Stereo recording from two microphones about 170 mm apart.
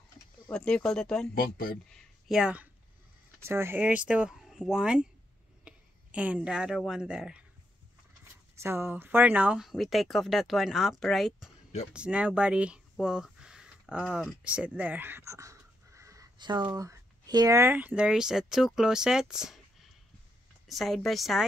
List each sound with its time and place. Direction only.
0.5 s speech: 5° left (ahead or behind)
1.3 s speech: 55° left (ahead or behind)
1.9 s speech: centre (ahead or behind)
8.5 s speech: 15° right (ahead or behind)
20.6 s speech: centre (ahead or behind)